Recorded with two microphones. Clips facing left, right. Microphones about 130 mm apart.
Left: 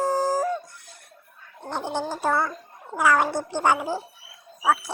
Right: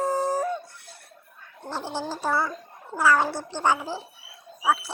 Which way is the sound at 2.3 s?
5° right (ahead or behind).